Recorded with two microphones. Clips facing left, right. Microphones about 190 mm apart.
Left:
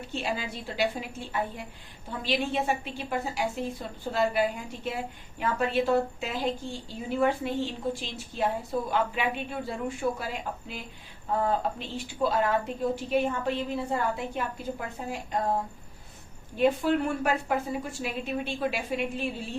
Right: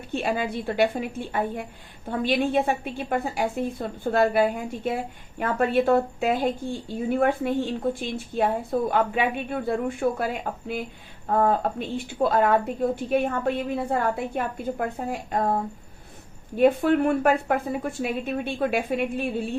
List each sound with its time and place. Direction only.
0.1 s a woman's voice: 55° right (ahead or behind)
16.6 s a woman's voice: 55° right (ahead or behind)